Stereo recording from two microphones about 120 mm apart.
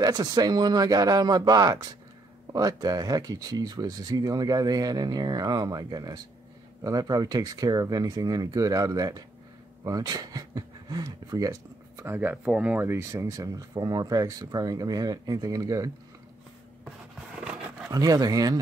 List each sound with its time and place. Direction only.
0.0 s speech: 35° right (ahead or behind)
12.0 s speech: 20° right (ahead or behind)
17.5 s a sound: 10° right (ahead or behind)
17.9 s speech: 30° right (ahead or behind)